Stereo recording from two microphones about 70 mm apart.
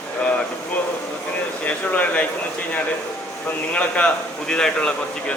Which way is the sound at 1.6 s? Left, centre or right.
Centre.